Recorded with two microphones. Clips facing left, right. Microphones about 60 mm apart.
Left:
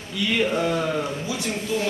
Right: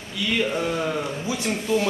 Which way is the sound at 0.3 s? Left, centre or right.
Centre.